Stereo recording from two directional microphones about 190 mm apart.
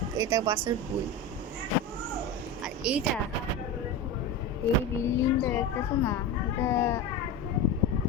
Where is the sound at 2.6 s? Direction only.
5° right (ahead or behind).